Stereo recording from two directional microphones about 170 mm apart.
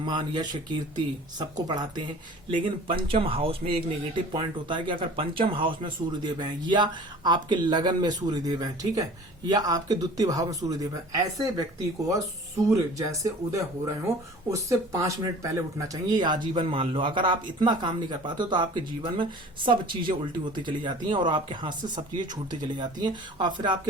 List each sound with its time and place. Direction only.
0.0 s speech: 25° right (ahead or behind)
12.7 s speech: 20° right (ahead or behind)